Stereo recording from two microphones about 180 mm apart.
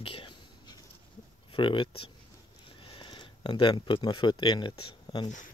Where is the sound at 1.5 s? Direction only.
30° left (ahead or behind).